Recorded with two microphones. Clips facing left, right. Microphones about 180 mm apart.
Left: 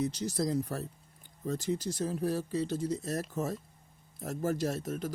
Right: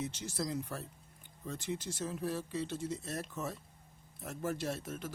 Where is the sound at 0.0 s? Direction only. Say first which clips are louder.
Left 7 dB; 40° left (ahead or behind).